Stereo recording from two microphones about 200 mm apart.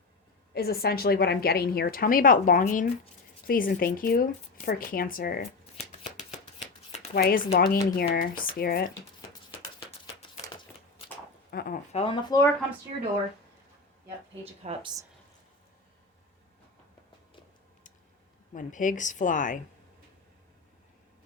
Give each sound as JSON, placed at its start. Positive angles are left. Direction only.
{"t": 0.5, "sound": "a woman's voice", "side_deg": 50}
{"t": 5.4, "sound": "shuffling cards", "side_deg": 35}
{"t": 7.1, "sound": "a woman's voice", "side_deg": 50}
{"t": 10.4, "sound": "shuffling cards", "side_deg": 25}
{"t": 11.5, "sound": "a woman's voice", "side_deg": 45}
{"t": 11.9, "sound": "speech", "side_deg": 30}
{"t": 12.9, "sound": "speech", "side_deg": -25}
{"t": 14.6, "sound": "speech", "side_deg": -30}
{"t": 18.5, "sound": "a woman's voice", "side_deg": 40}